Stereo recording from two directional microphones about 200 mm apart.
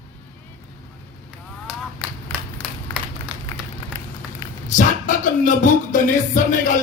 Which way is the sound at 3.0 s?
5° right (ahead or behind).